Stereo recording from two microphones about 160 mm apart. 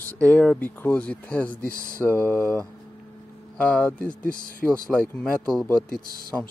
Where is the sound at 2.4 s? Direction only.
5° left (ahead or behind).